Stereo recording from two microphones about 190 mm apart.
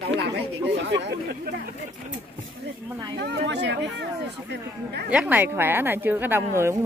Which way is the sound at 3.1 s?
65° right (ahead or behind).